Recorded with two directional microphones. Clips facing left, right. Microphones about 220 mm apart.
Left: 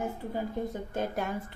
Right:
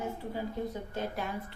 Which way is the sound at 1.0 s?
50° left (ahead or behind).